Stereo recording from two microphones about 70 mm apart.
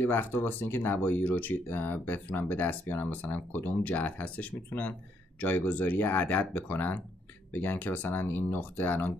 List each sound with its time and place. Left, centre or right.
0.0 s speech: left